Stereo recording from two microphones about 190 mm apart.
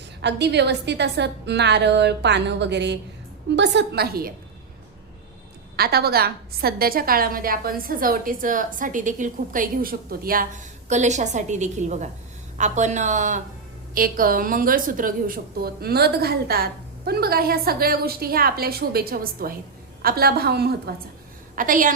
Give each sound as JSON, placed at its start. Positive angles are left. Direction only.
{"t": 0.2, "sound": "a woman's voice", "side_deg": -65}
{"t": 5.7, "sound": "a woman's voice", "side_deg": -55}
{"t": 21.5, "sound": "a woman's voice", "side_deg": -45}